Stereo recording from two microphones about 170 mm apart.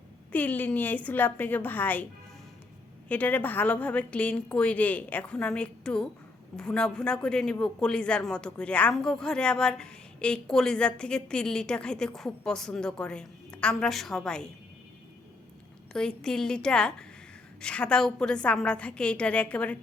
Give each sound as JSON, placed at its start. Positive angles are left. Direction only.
{"t": 0.3, "sound": "a woman's voice", "side_deg": 10}
{"t": 3.1, "sound": "a woman's voice", "side_deg": 10}
{"t": 15.9, "sound": "speech", "side_deg": 5}